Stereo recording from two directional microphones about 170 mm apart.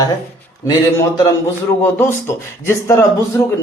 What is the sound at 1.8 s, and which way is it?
Speech, 15° left (ahead or behind).